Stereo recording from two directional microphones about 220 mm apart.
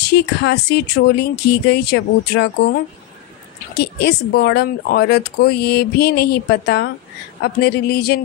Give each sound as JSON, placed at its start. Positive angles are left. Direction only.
{"t": 0.0, "sound": "speech", "side_deg": 50}